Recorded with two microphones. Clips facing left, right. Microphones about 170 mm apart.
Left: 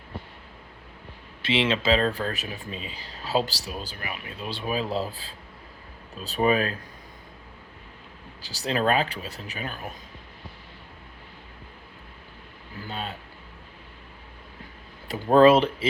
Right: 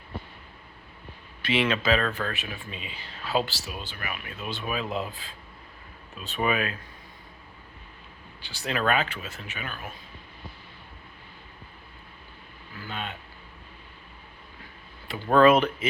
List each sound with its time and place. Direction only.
1.4 s speech: 25° left (ahead or behind)
8.4 s speech: 40° left (ahead or behind)
12.8 s a sound: 35° left (ahead or behind)
15.0 s speech: 35° left (ahead or behind)